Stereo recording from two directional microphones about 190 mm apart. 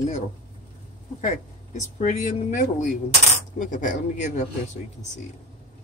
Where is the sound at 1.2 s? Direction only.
40° left (ahead or behind).